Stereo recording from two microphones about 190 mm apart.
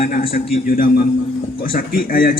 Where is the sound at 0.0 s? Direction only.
50° left (ahead or behind).